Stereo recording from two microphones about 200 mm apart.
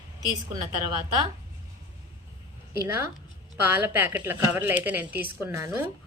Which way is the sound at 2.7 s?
15° right (ahead or behind).